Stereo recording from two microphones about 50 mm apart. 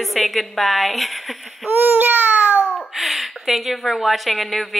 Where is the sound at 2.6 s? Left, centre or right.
Left.